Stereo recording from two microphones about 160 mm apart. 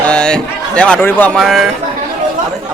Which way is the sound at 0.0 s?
5° left (ahead or behind).